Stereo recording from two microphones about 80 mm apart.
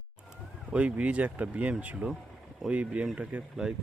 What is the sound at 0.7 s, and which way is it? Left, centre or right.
Speech, centre.